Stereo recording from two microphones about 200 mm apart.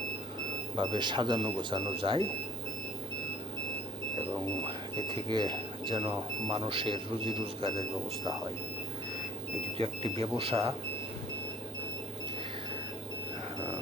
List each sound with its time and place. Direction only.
0.8 s speech: 25° right (ahead or behind)
4.6 s speech: 25° right (ahead or behind)
9.7 s speech: 30° right (ahead or behind)